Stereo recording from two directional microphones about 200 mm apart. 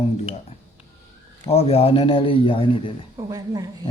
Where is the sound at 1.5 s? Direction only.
30° left (ahead or behind).